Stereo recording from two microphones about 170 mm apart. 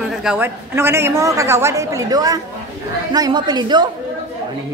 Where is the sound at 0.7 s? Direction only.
15° right (ahead or behind).